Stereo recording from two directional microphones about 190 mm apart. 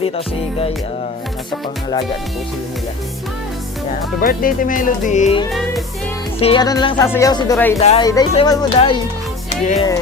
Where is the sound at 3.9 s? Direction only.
50° left (ahead or behind).